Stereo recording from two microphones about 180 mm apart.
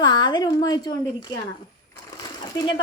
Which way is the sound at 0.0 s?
25° left (ahead or behind).